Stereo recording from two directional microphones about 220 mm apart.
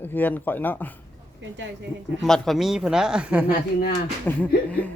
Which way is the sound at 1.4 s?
55° right (ahead or behind).